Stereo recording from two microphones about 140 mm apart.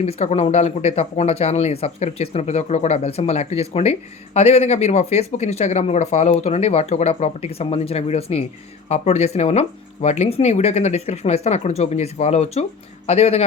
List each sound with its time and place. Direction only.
0.0 s speech: 50° left (ahead or behind)